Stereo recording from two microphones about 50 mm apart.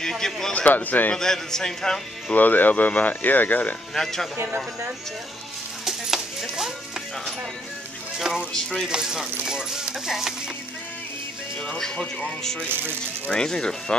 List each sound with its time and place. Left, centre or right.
0.0 s a man's voice: centre
0.5 s speech: left
1.1 s speech: centre
2.3 s speech: left
3.9 s speech: centre
5.9 s clip-clop: centre
8.5 s speech: centre
8.8 s speech: centre
11.8 s speech: centre
12.6 s speech: right
13.3 s speech: centre